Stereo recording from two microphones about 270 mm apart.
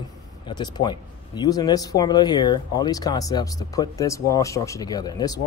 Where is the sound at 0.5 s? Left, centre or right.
Centre.